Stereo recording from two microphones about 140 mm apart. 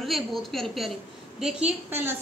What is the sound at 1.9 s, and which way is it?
Speech, 15° right (ahead or behind).